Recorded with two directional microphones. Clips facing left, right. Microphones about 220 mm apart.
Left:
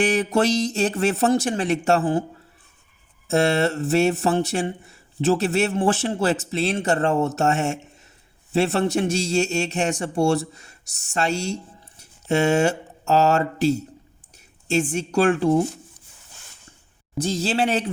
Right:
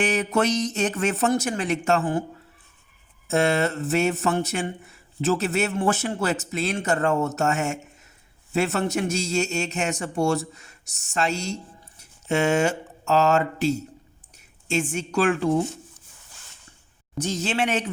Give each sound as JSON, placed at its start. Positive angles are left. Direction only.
{"t": 0.3, "sound": "speech", "side_deg": 30}
{"t": 3.2, "sound": "speech", "side_deg": 35}
{"t": 12.3, "sound": "speech", "side_deg": 35}
{"t": 14.7, "sound": "speech", "side_deg": 35}
{"t": 17.2, "sound": "speech", "side_deg": 35}